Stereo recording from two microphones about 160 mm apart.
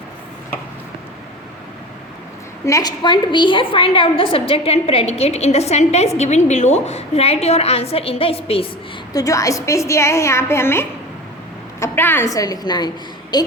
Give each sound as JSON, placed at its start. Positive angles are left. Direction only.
{"t": 2.6, "sound": "a woman's voice", "side_deg": 20}
{"t": 9.1, "sound": "a woman's voice", "side_deg": 20}